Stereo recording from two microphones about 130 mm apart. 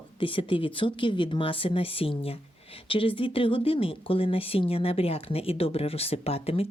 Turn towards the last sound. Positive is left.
turn(degrees=50)  # may be behind; listen again after turning